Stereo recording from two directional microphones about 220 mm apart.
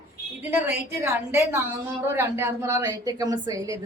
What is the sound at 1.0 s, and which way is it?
A woman's voice, 10° right (ahead or behind).